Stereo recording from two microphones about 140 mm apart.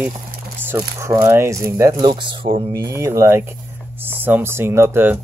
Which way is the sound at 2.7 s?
25° right (ahead or behind).